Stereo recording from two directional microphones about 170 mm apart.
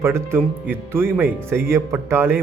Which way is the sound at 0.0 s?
15° right (ahead or behind).